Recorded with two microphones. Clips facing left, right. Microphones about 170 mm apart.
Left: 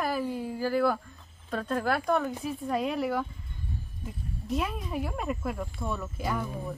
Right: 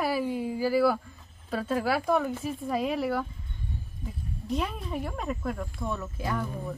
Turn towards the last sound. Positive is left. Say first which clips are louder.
# even
turn(degrees=5)  # may be behind; listen again after turning